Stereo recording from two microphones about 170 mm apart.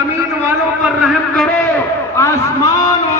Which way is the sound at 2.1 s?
15° left (ahead or behind).